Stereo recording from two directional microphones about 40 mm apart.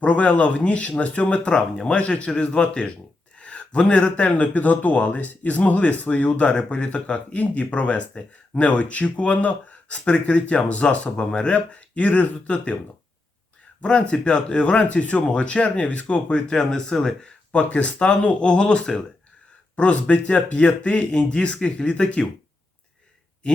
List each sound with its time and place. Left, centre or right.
0.0 s speech: left
11.5 s speech: left
13.8 s speech: left
16.5 s speech: centre
17.5 s speech: left